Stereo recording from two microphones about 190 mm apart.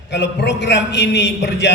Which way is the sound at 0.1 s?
65° left (ahead or behind).